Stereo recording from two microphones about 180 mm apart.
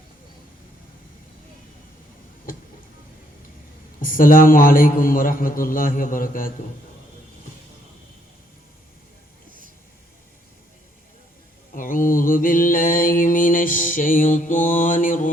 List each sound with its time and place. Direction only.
4.0 s mantra: 50° left (ahead or behind)
11.7 s mantra: 50° left (ahead or behind)